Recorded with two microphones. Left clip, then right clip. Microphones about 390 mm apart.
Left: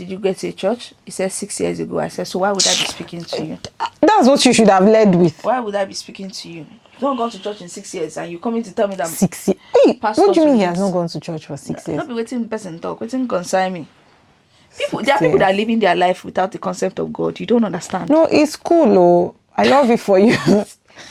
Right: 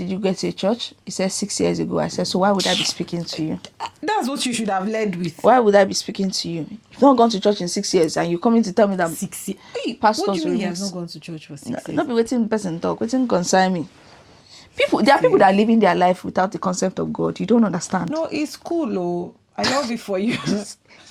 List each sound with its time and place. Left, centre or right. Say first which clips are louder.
0.0 s speech: left 2 dB; centre
3.6 s speech: left 13 dB; left
5.4 s speech: right 5 dB; right
7.0 s speech: right 6 dB; right
7.9 s speech: right 6 dB; right
9.2 s speech: left 13 dB; left
11.9 s speech: right 5 dB; right
14.9 s speech: even; right; by 18.1 s centre
18.2 s speech: left 11 dB; left